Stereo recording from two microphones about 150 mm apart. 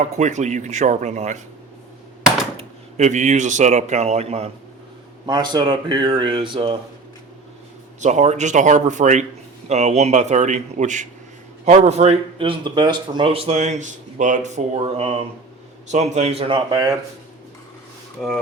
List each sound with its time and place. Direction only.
0.0 s speech: 50° right (ahead or behind)
2.6 s speech: 50° right (ahead or behind)
5.2 s speech: 30° right (ahead or behind)
8.0 s speech: 50° right (ahead or behind)
18.2 s speech: 5° right (ahead or behind)